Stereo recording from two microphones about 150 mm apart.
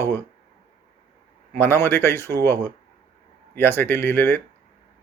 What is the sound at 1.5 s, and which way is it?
Speech, 15° left (ahead or behind).